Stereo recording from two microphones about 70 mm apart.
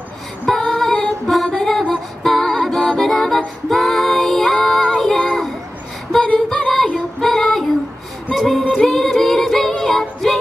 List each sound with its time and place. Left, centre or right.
0.6 s music: centre
4.6 s child singing: centre
6.2 s female singing: centre
7.2 s child singing: centre
8.4 s music: centre